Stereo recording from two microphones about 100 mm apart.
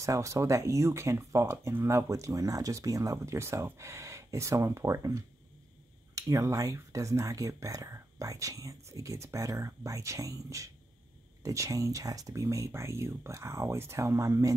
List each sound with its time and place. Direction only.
0.0 s speech: 30° right (ahead or behind)